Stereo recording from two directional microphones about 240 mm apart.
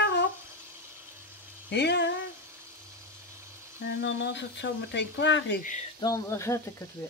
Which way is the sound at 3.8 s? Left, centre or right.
Left.